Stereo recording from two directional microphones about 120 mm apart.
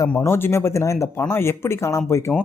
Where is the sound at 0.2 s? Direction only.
20° left (ahead or behind).